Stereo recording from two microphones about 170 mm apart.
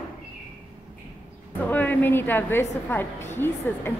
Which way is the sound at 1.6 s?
10° left (ahead or behind).